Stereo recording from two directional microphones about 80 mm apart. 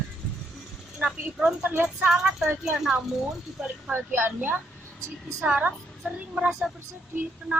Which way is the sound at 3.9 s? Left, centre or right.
Right.